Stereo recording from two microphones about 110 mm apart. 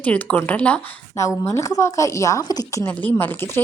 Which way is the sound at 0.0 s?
15° left (ahead or behind).